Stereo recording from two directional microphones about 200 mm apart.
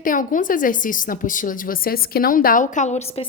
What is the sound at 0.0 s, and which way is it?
A woman's voice, 40° left (ahead or behind).